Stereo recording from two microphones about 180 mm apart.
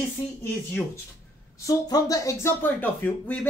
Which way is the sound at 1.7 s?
20° left (ahead or behind).